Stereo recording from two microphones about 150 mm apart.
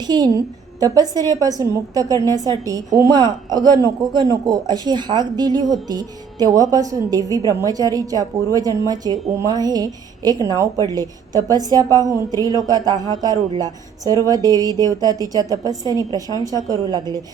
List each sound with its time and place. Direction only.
0.0 s a woman's voice: 25° right (ahead or behind)